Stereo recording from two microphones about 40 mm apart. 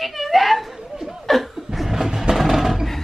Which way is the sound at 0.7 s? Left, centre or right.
Centre.